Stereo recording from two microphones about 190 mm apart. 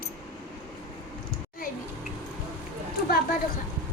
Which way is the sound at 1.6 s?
45° left (ahead or behind).